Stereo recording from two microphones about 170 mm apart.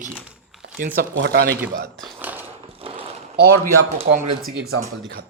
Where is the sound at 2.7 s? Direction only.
30° right (ahead or behind).